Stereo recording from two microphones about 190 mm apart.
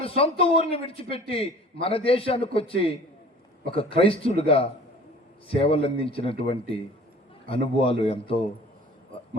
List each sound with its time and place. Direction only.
0.0 s a man's voice: 30° left (ahead or behind)